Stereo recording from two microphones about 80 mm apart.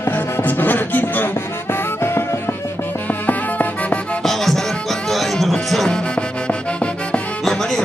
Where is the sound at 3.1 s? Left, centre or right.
Centre.